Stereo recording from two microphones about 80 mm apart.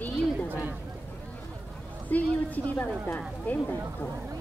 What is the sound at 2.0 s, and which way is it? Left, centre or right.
Speech, centre.